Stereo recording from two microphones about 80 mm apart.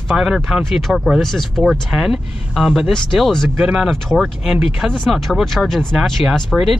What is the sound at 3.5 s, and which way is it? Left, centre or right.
Speech, centre.